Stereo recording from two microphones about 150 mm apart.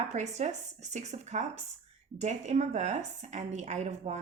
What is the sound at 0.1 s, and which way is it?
Speech, 50° right (ahead or behind).